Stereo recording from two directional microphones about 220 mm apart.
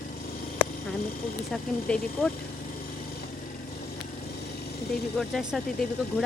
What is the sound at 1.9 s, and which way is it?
Speech, 5° left (ahead or behind).